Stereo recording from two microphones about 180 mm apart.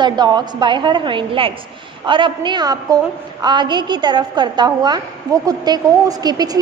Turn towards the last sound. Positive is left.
turn(degrees=-20)  # may be behind; listen again after turning